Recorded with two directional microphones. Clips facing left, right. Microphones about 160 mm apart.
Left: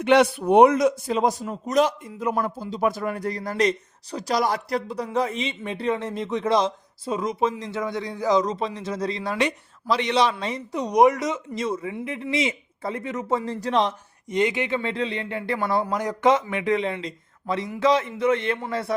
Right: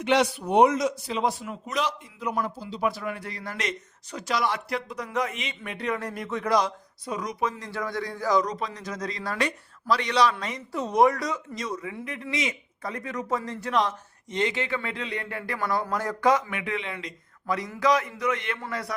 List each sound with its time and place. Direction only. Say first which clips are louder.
0.0 s a man's voice: left 5 dB; 55° left (ahead or behind); by 13.9 s 30° left (ahead or behind)
14.3 s speech: left 4 dB; 15° left (ahead or behind)